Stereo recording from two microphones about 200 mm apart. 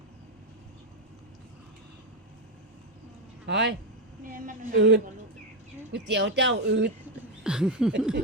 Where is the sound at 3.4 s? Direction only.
60° right (ahead or behind).